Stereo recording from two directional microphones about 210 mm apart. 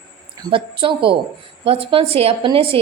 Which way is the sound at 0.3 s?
20° right (ahead or behind).